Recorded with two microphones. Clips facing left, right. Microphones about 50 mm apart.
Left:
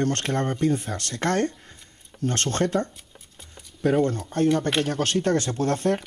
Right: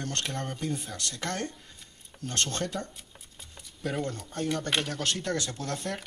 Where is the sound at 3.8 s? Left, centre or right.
Left.